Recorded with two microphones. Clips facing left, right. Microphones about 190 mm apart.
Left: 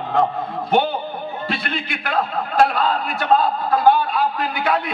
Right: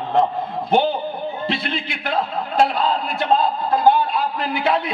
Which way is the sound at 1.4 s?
25° right (ahead or behind).